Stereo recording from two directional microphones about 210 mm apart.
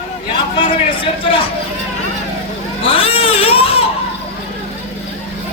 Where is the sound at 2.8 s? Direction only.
25° left (ahead or behind).